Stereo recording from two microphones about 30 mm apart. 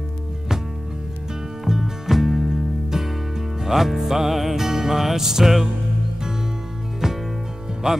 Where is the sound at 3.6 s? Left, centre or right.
Centre.